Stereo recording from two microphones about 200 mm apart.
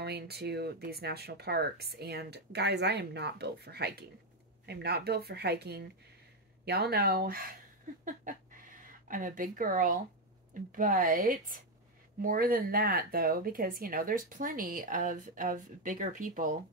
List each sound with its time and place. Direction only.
0.0 s speech: 55° right (ahead or behind)
8.0 s a sound: 40° right (ahead or behind)
9.0 s speech: 40° right (ahead or behind)